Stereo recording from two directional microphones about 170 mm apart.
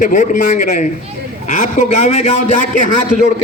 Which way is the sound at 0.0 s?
50° left (ahead or behind).